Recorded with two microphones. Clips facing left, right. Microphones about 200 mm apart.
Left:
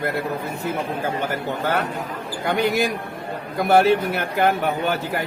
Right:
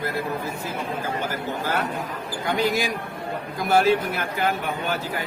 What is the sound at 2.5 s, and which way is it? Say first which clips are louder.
Speech: left 3 dB; 60° left (ahead or behind).